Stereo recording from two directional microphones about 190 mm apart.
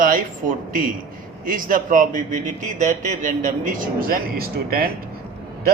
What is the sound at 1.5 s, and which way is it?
A man's voice, 45° right (ahead or behind).